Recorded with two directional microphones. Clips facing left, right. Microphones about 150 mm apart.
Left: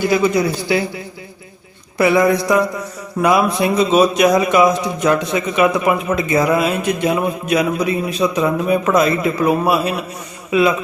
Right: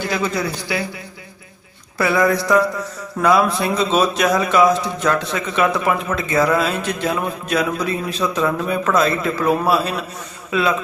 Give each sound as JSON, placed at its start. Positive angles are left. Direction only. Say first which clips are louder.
{"t": 0.0, "sound": "a man's voice", "louder": "left 7 dB", "side_deg": 15}
{"t": 0.7, "sound": "speech", "louder": "left 6 dB", "side_deg": 25}
{"t": 2.0, "sound": "a man's voice", "louder": "left 4 dB", "side_deg": 20}